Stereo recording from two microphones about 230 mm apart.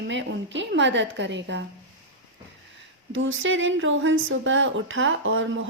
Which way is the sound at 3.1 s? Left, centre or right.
Right.